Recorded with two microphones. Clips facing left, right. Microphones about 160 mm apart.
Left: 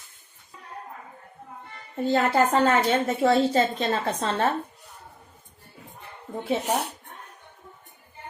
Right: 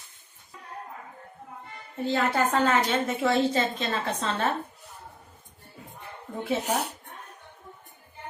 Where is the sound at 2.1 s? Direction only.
40° left (ahead or behind).